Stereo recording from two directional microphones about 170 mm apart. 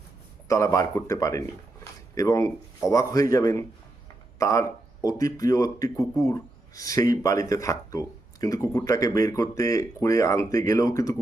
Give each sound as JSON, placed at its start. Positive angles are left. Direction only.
{"t": 0.4, "sound": "speech", "side_deg": 20}